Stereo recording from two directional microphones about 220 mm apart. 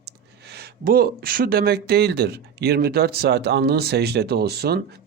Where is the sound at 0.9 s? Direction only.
40° right (ahead or behind).